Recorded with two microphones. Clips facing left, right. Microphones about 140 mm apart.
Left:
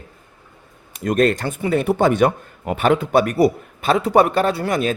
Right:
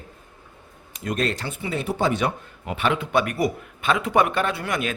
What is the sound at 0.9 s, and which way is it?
Speech, 50° left (ahead or behind).